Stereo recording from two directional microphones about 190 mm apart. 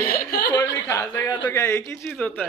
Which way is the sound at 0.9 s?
15° left (ahead or behind).